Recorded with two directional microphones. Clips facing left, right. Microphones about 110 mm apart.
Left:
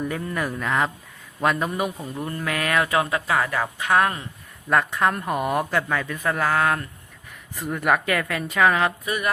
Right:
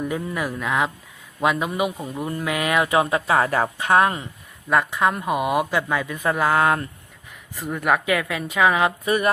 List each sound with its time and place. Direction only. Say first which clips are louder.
0.0 s a man's voice: right 1 dB; 5° right (ahead or behind); by 4.3 s 20° right (ahead or behind)
4.7 s a man's voice: right 1 dB; 5° right (ahead or behind); by 6.8 s 20° right (ahead or behind)
7.5 s a man's voice: even; centre (ahead or behind)
9.0 s speech: right 5 dB; 35° right (ahead or behind)